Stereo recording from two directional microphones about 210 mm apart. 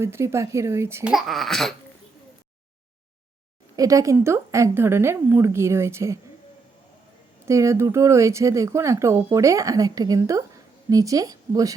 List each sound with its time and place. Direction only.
0.0 s speech: 10° right (ahead or behind)
3.8 s speech: 15° right (ahead or behind)
7.4 s speech: 15° right (ahead or behind)